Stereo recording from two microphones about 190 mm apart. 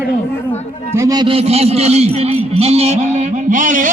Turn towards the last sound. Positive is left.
turn(degrees=-40)  # may be behind; listen again after turning